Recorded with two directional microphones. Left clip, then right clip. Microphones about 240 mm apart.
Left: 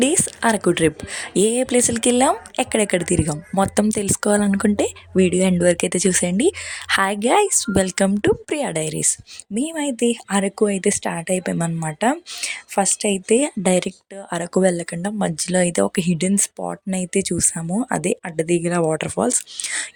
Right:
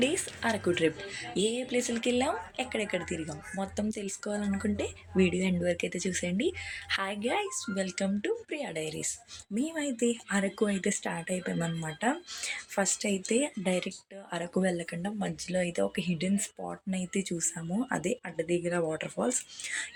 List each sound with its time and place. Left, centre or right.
0.0 s speech: left